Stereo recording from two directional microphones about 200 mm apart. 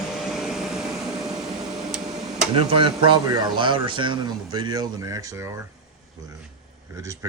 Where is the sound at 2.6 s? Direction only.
25° right (ahead or behind).